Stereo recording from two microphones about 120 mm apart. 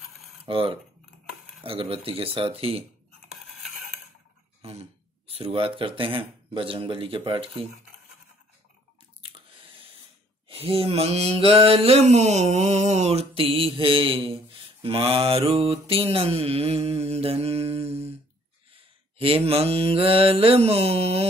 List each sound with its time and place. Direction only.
0.5 s speech: 50° right (ahead or behind)
3.4 s a sound: centre (ahead or behind)
4.6 s speech: 55° right (ahead or behind)
10.5 s mantra: 55° right (ahead or behind)